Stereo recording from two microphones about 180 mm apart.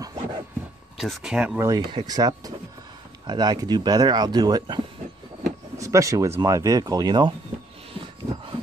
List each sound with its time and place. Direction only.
0.0 s a sound: 20° right (ahead or behind)
0.9 s speech: 5° right (ahead or behind)
1.6 s speech: 25° right (ahead or behind)
5.8 s speech: 15° right (ahead or behind)